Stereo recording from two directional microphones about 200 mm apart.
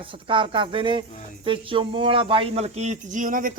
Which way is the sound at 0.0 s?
25° right (ahead or behind).